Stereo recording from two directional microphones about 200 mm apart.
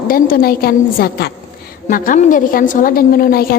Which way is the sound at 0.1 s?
45° left (ahead or behind).